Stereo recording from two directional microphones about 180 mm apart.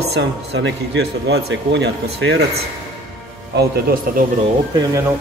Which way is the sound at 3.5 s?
60° right (ahead or behind).